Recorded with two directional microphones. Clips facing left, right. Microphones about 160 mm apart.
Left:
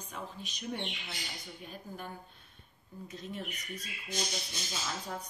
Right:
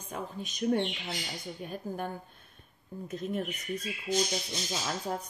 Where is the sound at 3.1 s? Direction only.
50° right (ahead or behind).